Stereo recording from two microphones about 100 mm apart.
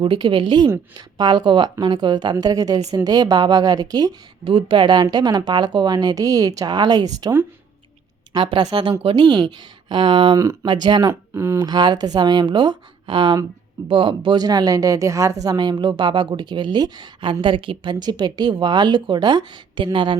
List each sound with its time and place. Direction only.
0.0 s a woman's voice: 55° right (ahead or behind); by 4.1 s 40° right (ahead or behind)
4.4 s a woman's voice: 55° right (ahead or behind)
9.1 s a woman's voice: 45° right (ahead or behind)
10.3 s a woman's voice: 30° right (ahead or behind)
10.7 s a woman's voice: 50° right (ahead or behind)
11.0 s speech: 30° right (ahead or behind)
11.6 s a woman's voice: 45° right (ahead or behind)